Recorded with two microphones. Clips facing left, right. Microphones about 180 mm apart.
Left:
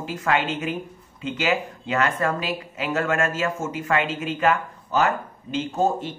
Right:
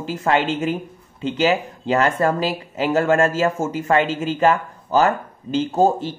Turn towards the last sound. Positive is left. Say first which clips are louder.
# right 5 dB
turn(degrees=-35)  # may be behind; listen again after turning